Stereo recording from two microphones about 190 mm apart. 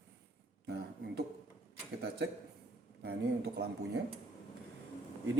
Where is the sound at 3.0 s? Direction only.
60° right (ahead or behind).